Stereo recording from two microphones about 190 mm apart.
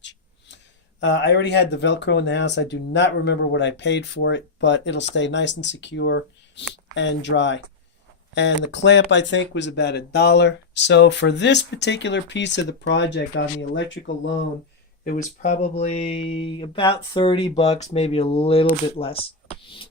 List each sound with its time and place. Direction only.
0.0 s speech: 70° left (ahead or behind)
15.4 s speech: 40° left (ahead or behind)